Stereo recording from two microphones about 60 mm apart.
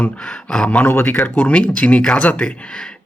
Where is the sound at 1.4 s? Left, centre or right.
Left.